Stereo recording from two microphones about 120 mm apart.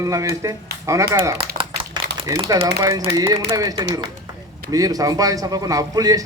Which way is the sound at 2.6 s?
30° right (ahead or behind).